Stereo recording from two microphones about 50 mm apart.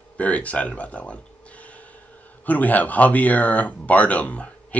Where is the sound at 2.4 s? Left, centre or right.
Left.